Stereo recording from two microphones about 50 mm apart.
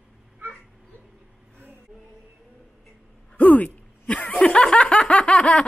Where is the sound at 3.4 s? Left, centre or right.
Left.